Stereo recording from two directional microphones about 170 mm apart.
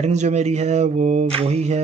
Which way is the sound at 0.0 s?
40° right (ahead or behind).